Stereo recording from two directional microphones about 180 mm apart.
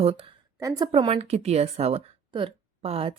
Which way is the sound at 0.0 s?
30° right (ahead or behind).